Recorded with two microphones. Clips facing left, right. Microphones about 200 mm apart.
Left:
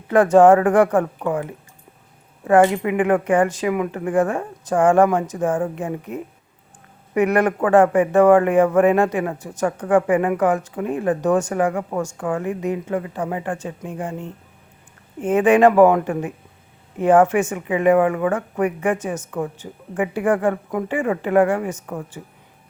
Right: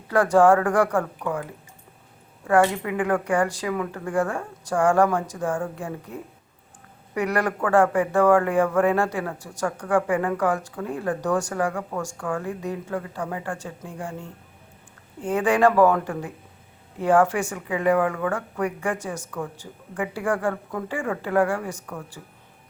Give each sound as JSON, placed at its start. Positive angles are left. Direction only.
{"t": 0.1, "sound": "speech", "side_deg": 20}
{"t": 2.5, "sound": "speech", "side_deg": 20}